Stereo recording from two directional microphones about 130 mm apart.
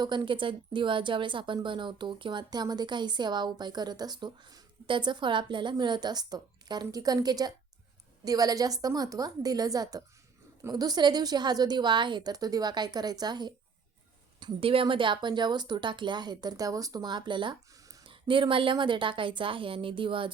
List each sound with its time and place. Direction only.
0.0 s a woman's voice: 35° right (ahead or behind)